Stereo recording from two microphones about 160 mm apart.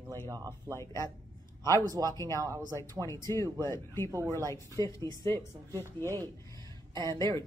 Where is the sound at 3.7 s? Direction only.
20° left (ahead or behind).